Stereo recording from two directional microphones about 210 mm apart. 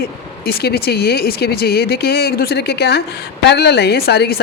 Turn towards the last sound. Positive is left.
turn(degrees=50)  # may be behind; listen again after turning